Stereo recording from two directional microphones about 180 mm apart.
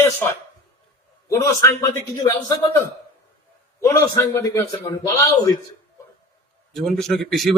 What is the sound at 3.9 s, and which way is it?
Speech, 20° left (ahead or behind).